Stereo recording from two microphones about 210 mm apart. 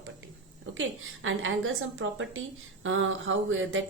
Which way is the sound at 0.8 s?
70° right (ahead or behind).